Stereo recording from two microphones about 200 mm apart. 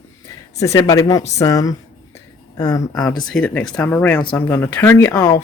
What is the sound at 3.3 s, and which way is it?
Speech, 5° left (ahead or behind).